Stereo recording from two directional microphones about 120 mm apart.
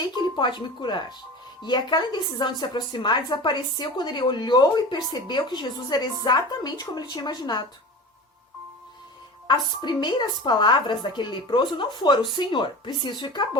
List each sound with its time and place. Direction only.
0.3 s a woman's voice: 40° left (ahead or behind)
9.5 s a woman's voice: 40° left (ahead or behind)